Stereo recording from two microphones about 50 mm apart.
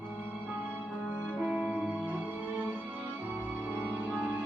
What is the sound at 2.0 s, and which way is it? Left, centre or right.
Music, right.